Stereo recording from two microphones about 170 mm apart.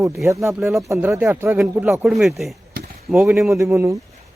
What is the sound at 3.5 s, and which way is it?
Speech, 15° right (ahead or behind).